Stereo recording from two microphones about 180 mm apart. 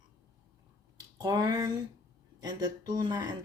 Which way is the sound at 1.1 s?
20° right (ahead or behind).